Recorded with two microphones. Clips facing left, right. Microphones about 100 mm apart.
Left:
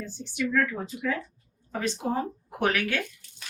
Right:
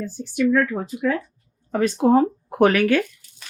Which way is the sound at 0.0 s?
50° right (ahead or behind).